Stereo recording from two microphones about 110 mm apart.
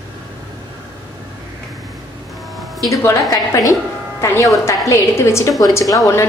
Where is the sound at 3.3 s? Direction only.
35° left (ahead or behind).